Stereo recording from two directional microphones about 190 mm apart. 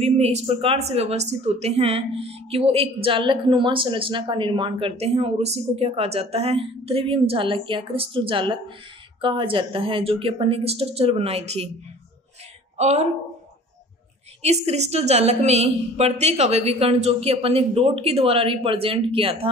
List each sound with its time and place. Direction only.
0.0 s a woman's voice: 35° right (ahead or behind)
12.7 s a woman's voice: 35° right (ahead or behind)
14.4 s a woman's voice: 35° right (ahead or behind)